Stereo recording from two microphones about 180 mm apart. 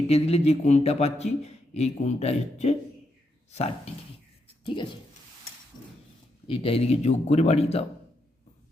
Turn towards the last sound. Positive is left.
turn(degrees=35)  # may be behind; listen again after turning